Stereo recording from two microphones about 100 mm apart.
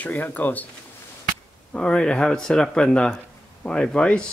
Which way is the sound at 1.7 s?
10° left (ahead or behind).